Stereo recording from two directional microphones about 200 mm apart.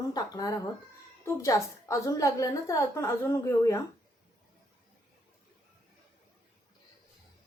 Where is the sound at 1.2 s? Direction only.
15° left (ahead or behind).